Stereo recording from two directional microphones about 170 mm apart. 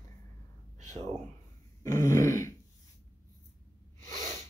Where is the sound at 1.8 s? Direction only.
20° left (ahead or behind).